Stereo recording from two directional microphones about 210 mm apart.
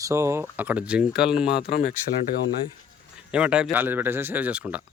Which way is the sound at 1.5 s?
50° left (ahead or behind).